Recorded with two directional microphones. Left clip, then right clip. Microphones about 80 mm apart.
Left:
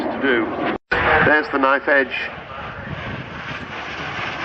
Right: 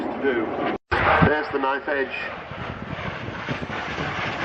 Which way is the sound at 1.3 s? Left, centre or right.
Left.